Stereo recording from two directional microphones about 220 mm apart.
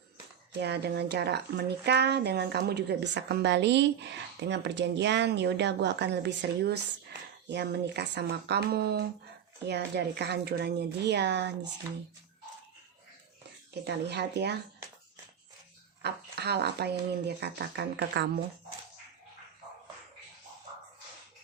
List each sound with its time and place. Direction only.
0.6 s speech: 50° right (ahead or behind)
13.8 s speech: 50° right (ahead or behind)
16.0 s speech: 50° right (ahead or behind)